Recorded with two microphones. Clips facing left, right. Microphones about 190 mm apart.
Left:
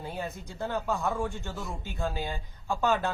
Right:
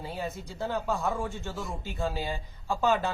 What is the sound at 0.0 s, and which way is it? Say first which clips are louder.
Speech: right 1 dB; centre (ahead or behind).